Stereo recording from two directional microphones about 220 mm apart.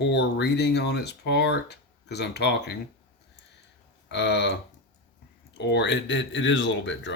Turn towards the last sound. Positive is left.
turn(degrees=55)  # may be behind; listen again after turning